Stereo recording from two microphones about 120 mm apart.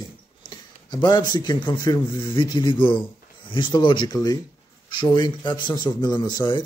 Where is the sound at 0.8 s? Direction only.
35° left (ahead or behind).